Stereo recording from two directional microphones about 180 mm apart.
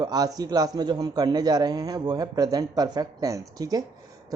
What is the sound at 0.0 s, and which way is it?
A woman's voice, 20° right (ahead or behind).